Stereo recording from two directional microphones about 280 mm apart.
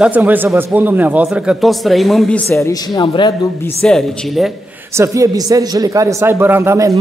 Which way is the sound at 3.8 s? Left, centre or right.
Centre.